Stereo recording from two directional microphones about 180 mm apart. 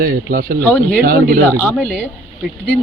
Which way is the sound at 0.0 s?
55° right (ahead or behind).